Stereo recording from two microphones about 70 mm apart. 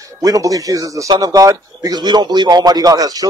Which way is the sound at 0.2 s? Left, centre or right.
Right.